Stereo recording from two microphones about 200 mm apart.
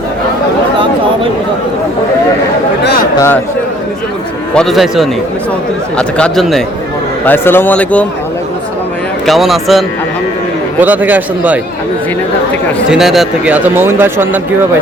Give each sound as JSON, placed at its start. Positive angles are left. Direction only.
{"t": 2.8, "sound": "a sound", "side_deg": 50}
{"t": 3.2, "sound": "speech", "side_deg": 10}
{"t": 4.5, "sound": "speech", "side_deg": 0}
{"t": 9.2, "sound": "speech", "side_deg": 0}
{"t": 12.9, "sound": "speech", "side_deg": 0}